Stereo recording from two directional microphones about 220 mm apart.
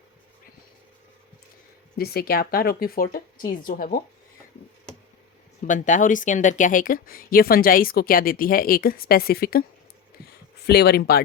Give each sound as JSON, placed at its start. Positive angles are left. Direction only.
{"t": 2.0, "sound": "speech", "side_deg": 45}
{"t": 5.6, "sound": "speech", "side_deg": 35}
{"t": 10.7, "sound": "speech", "side_deg": 45}